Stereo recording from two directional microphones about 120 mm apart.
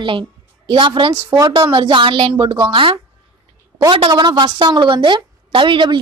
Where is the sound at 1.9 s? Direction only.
45° right (ahead or behind).